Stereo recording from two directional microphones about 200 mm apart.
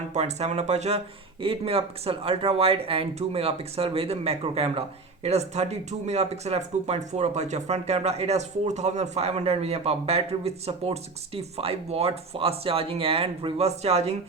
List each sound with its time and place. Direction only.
0.1 s speech: 35° right (ahead or behind)